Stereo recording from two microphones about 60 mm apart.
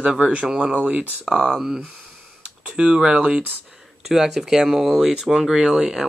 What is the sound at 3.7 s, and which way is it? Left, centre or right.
Speech, centre.